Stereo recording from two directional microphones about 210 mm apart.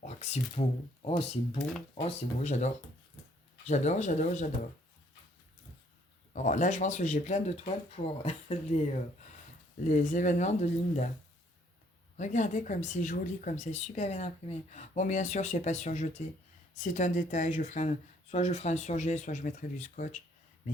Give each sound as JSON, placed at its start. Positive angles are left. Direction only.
{"t": 0.0, "sound": "speech", "side_deg": 30}
{"t": 6.3, "sound": "speech", "side_deg": 35}
{"t": 12.1, "sound": "speech", "side_deg": 35}